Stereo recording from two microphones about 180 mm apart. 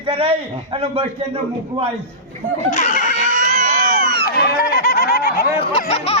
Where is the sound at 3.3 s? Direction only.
45° right (ahead or behind).